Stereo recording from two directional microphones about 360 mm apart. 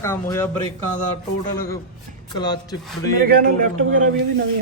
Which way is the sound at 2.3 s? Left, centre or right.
Centre.